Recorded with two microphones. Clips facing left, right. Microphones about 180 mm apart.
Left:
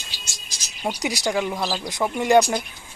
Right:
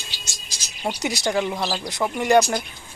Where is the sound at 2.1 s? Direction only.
15° left (ahead or behind).